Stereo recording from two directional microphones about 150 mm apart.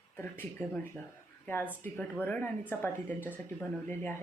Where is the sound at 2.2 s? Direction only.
10° left (ahead or behind).